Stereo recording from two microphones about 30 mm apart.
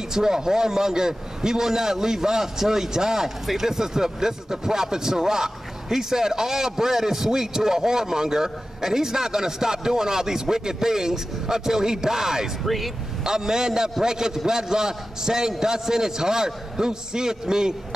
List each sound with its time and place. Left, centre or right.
0.1 s speech: centre
12.6 s speech: centre
13.2 s a man's voice: centre